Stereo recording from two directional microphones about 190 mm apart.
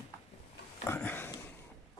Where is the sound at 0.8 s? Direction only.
10° left (ahead or behind).